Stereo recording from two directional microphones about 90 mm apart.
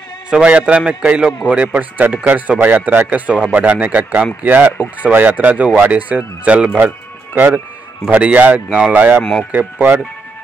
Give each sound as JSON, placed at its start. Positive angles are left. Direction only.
{"t": 0.3, "sound": "speech", "side_deg": -10}
{"t": 9.2, "sound": "speech", "side_deg": 5}
{"t": 9.5, "sound": "speech", "side_deg": -20}